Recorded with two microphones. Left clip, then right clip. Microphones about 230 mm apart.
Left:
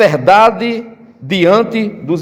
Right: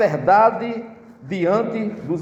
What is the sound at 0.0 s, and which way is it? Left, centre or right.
A man's voice, left.